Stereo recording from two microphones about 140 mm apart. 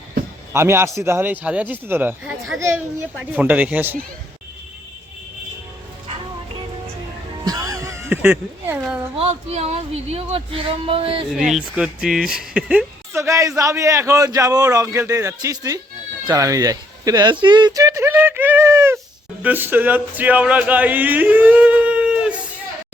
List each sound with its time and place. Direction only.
0.5 s speech: 20° right (ahead or behind)
7.4 s a sound: 25° right (ahead or behind)
8.8 s speech: 10° right (ahead or behind)
9.1 s speech: 45° right (ahead or behind)
11.3 s speech: 5° right (ahead or behind)
13.1 s a man's voice: 20° right (ahead or behind)
17.4 s a sound: 35° right (ahead or behind)
19.4 s speech: 10° right (ahead or behind)